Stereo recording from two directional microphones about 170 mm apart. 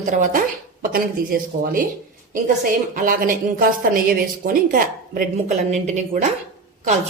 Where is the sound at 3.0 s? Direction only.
55° right (ahead or behind).